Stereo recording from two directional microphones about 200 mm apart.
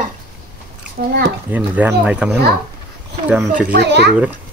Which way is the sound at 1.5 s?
5° right (ahead or behind).